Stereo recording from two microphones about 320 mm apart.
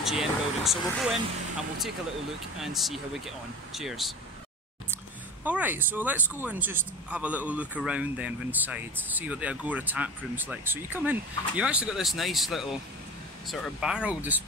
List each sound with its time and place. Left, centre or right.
0.0 s speech: centre
2.6 s speech: centre